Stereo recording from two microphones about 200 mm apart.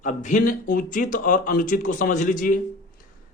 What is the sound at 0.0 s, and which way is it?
A man's voice, 40° left (ahead or behind).